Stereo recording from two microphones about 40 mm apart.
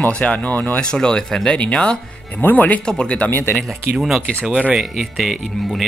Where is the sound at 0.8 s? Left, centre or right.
Left.